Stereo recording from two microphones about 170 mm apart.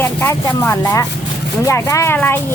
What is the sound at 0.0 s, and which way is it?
Speech, 15° left (ahead or behind).